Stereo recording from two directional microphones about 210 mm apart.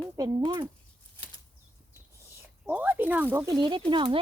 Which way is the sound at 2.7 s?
10° right (ahead or behind).